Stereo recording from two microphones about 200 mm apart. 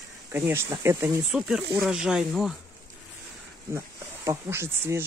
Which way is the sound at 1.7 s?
Centre (ahead or behind).